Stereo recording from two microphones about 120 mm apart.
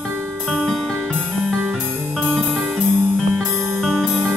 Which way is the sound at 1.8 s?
15° right (ahead or behind).